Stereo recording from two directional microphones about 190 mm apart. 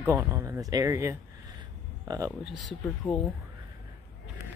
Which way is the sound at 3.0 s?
10° left (ahead or behind).